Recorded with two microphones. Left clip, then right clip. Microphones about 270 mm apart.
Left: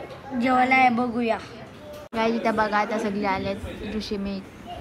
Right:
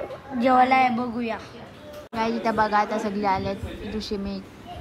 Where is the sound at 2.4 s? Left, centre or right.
Centre.